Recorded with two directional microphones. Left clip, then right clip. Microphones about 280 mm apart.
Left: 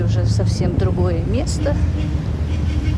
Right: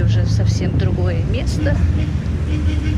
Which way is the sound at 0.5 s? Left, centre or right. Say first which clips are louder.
Left 2 dB; left.